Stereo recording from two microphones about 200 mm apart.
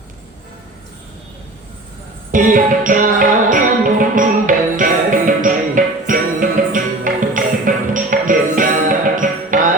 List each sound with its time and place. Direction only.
2.3 s music: 40° right (ahead or behind)